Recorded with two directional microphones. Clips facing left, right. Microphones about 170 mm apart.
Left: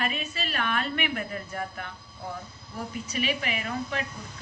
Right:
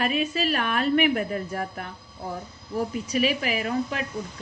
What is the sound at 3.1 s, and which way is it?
Speech, 35° right (ahead or behind).